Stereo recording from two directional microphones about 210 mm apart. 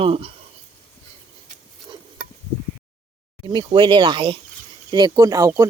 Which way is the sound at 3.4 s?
20° right (ahead or behind).